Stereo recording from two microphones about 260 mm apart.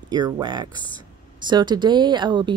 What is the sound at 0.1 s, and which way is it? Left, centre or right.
Speech, centre.